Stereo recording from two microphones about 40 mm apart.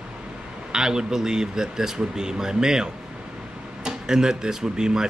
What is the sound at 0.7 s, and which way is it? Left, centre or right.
A man's voice, centre.